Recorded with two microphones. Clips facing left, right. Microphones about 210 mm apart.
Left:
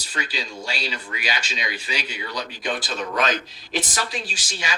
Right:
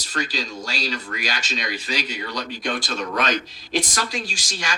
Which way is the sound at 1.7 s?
40° right (ahead or behind).